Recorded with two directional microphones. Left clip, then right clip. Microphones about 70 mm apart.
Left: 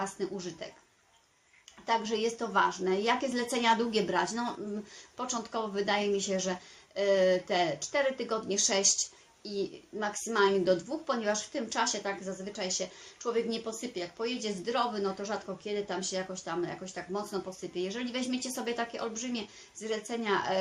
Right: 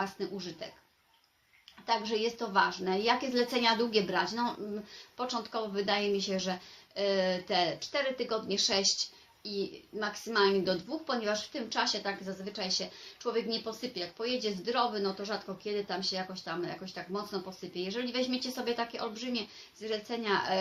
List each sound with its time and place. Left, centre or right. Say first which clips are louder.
0.0 s a woman's voice: left 1 dB; left
1.9 s a woman's voice: left 1 dB; left